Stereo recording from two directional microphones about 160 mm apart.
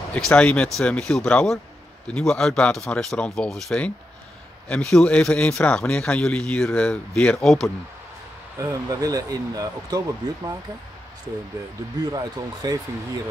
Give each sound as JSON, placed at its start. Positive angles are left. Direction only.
{"t": 0.1, "sound": "a man's voice", "side_deg": 5}
{"t": 8.5, "sound": "speech", "side_deg": -20}
{"t": 12.0, "sound": "speech", "side_deg": -25}